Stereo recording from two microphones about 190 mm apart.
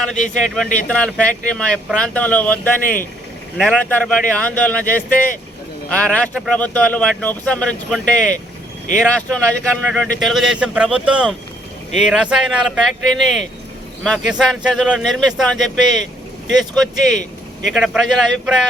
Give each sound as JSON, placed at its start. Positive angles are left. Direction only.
{"t": 0.0, "sound": "speech", "side_deg": 5}
{"t": 14.5, "sound": "speech", "side_deg": 0}